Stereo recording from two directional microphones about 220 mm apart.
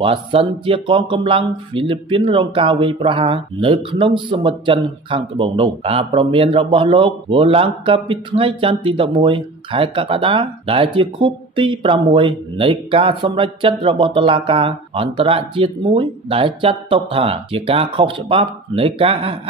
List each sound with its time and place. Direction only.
0.0 s speech: 25° right (ahead or behind)